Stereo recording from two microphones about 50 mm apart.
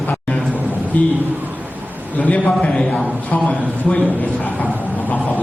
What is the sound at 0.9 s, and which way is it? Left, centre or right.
Speech, left.